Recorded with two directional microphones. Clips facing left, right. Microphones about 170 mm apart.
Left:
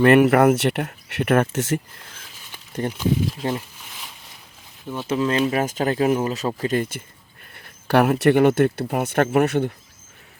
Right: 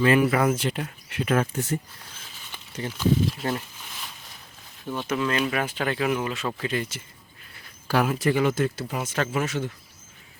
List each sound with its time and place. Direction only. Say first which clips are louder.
0.0 s speech: left 6 dB; 65° left (ahead or behind); by 1.8 s 85° left
3.0 s speech: right 1 dB; 15° left (ahead or behind)
5.0 s speech: left 5 dB; 30° left (ahead or behind); by 7.0 s 50° left (ahead or behind)
7.5 s speech: left 6 dB; 60° left (ahead or behind)